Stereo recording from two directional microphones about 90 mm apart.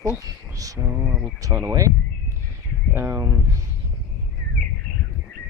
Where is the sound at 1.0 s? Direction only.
20° right (ahead or behind).